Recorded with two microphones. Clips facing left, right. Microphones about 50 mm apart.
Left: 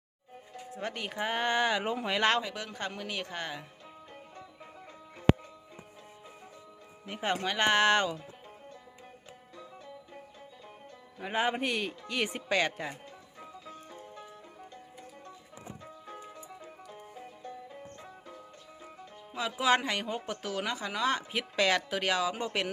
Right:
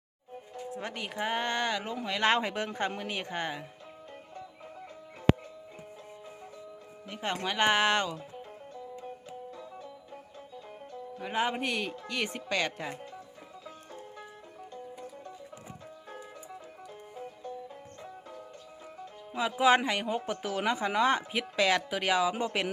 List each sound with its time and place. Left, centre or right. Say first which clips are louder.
0.7 s speech: left 1 dB; centre
2.4 s speech: right 5 dB; right
2.6 s speech: right 4 dB; right
7.2 s speech: even; centre
11.2 s speech: left 1 dB; centre
19.3 s speech: right 3 dB; centre
21.3 s speech: right 1 dB; centre